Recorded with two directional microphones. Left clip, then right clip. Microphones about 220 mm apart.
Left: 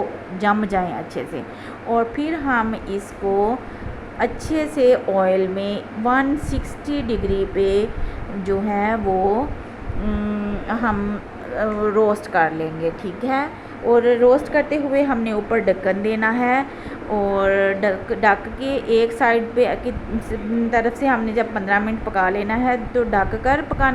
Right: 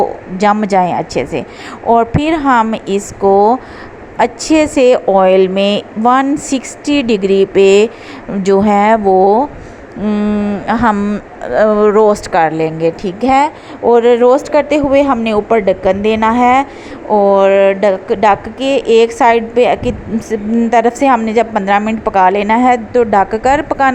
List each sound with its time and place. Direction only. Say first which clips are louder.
0.3 s a woman's voice: right 9 dB; 30° right (ahead or behind)